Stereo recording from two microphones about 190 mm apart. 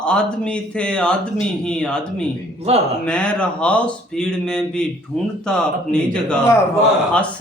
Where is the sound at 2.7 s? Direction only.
35° right (ahead or behind).